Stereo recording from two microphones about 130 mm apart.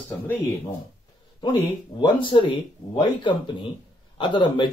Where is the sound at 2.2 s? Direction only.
40° left (ahead or behind).